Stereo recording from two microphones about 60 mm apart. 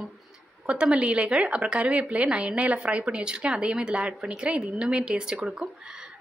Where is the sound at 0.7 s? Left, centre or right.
Centre.